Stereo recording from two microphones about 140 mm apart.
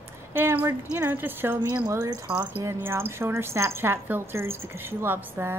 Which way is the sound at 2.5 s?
15° right (ahead or behind).